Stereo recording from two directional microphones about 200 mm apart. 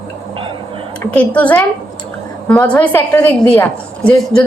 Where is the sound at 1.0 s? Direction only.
5° left (ahead or behind).